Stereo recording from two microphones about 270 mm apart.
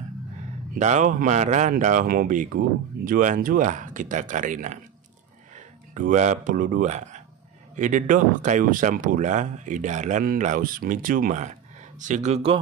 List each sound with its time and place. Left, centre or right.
0.7 s speech: right
5.9 s speech: right